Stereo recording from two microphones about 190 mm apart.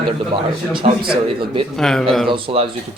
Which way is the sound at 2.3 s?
30° right (ahead or behind).